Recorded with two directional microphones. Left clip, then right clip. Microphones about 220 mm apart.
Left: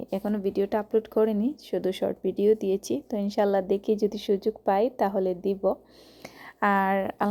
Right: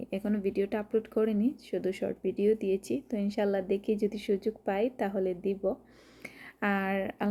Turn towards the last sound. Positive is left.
turn(degrees=5)  # may be behind; listen again after turning